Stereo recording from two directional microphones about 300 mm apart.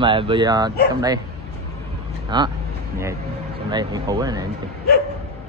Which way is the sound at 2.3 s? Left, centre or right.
Centre.